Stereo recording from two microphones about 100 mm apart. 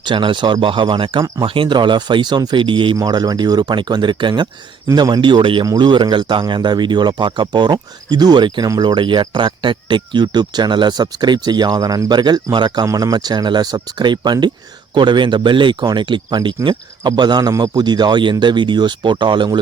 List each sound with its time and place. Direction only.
0.0 s speech: 55° right (ahead or behind)
3.0 s speech: 40° right (ahead or behind); by 5.6 s 55° right (ahead or behind)
5.6 s speech: 45° right (ahead or behind)
12.8 s speech: 35° right (ahead or behind); by 19.5 s 50° right (ahead or behind)